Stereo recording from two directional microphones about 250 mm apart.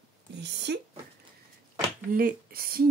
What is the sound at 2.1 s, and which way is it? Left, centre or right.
Speech, right.